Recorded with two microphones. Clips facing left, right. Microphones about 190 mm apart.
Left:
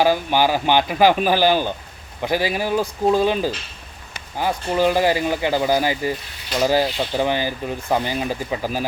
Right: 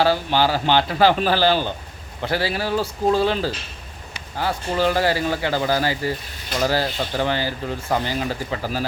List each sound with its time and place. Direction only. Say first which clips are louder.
0.0 s speech: left 1 dB; 15° left (ahead or behind)